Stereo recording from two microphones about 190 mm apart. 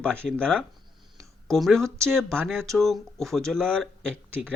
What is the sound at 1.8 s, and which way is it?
Speech, 15° right (ahead or behind).